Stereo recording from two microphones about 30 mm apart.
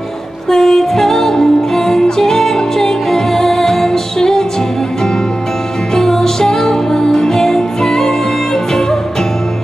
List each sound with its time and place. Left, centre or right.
0.5 s music: centre
5.9 s music: centre